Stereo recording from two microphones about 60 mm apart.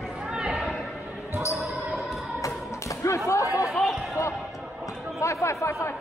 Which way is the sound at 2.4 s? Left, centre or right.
Left.